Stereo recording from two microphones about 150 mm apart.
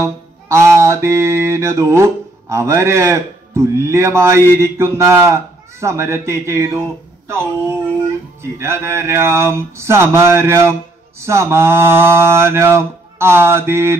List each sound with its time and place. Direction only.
0.0 s speech: 20° right (ahead or behind)